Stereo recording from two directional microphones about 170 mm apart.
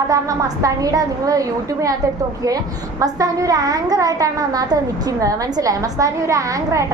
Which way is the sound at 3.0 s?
20° right (ahead or behind).